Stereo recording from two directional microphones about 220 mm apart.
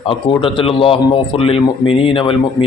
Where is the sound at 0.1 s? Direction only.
25° left (ahead or behind).